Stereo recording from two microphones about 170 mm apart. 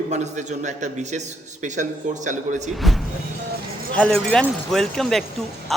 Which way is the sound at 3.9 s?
5° left (ahead or behind).